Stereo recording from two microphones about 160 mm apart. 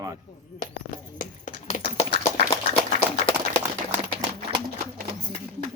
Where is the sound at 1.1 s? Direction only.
55° left (ahead or behind).